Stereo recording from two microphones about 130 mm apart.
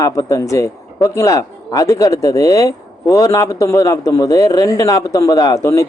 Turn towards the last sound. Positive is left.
turn(degrees=20)  # may be behind; listen again after turning